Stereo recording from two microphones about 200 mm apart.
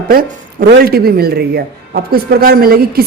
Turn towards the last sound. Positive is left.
turn(degrees=-50)  # may be behind; listen again after turning